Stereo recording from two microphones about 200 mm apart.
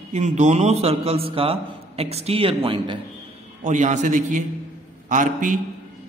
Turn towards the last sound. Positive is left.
turn(degrees=-40)  # may be behind; listen again after turning